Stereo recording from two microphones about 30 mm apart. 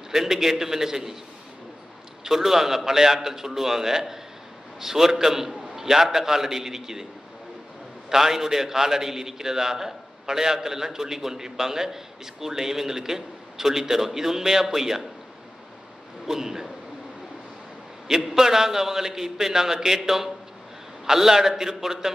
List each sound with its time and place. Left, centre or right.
0.1 s a man's voice: centre
2.2 s a man's voice: centre
8.1 s a man's voice: centre
16.3 s speech: centre
18.3 s a man's voice: centre